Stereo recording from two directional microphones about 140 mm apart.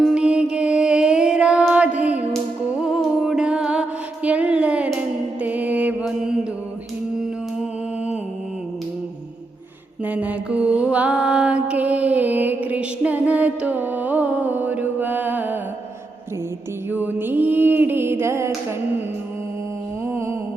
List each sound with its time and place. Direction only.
0.0 s music: 5° right (ahead or behind)
7.2 s mantra: 10° right (ahead or behind)
10.1 s mantra: 10° right (ahead or behind)
16.9 s music: 10° right (ahead or behind)
20.1 s a sound: 20° right (ahead or behind)